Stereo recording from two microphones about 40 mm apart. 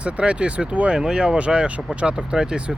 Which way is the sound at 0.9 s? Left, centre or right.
Centre.